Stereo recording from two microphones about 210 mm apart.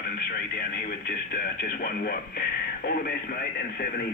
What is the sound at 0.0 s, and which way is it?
Speech, 45° left (ahead or behind).